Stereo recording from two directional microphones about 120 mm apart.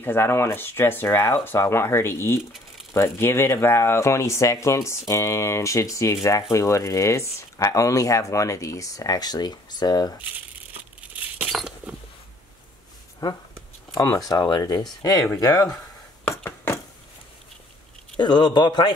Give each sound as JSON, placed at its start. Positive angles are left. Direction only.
{"t": 0.0, "sound": "speech", "side_deg": 20}
{"t": 11.0, "sound": "tearing", "side_deg": -10}
{"t": 11.4, "sound": "a sound", "side_deg": 0}
{"t": 13.2, "sound": "speech", "side_deg": 30}
{"t": 16.3, "sound": "a sound", "side_deg": 20}
{"t": 18.1, "sound": "speech", "side_deg": 40}